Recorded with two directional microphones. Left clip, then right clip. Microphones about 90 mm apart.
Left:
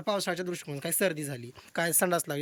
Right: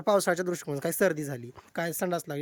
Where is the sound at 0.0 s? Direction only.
65° right (ahead or behind); by 1.4 s 50° right (ahead or behind).